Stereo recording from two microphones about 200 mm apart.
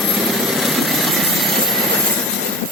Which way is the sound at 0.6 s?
Centre (ahead or behind).